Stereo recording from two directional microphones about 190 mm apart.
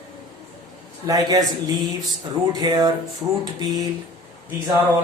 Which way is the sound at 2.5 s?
20° right (ahead or behind).